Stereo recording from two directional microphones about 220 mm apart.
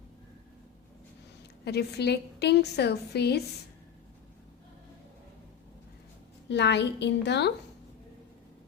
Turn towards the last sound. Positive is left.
turn(degrees=50)  # may be behind; listen again after turning